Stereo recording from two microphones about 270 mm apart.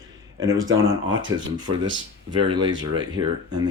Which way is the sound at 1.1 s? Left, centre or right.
Centre.